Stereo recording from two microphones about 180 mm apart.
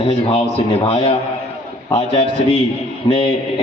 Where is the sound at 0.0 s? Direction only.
30° left (ahead or behind).